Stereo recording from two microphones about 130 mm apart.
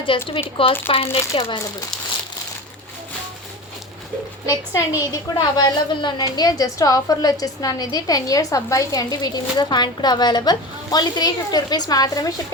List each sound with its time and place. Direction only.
0.3 s speech: 45° left (ahead or behind)
4.4 s a woman's voice: 25° left (ahead or behind)